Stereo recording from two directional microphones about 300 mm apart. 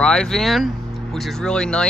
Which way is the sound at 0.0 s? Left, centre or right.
Centre.